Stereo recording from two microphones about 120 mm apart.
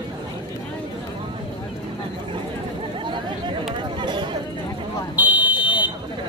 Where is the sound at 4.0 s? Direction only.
40° right (ahead or behind).